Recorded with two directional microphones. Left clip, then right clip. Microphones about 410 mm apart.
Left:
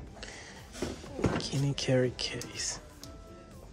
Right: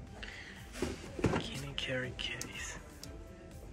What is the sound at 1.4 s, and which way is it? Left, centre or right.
Speech, centre.